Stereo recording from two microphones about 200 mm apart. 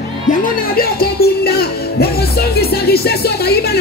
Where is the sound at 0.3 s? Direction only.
45° left (ahead or behind).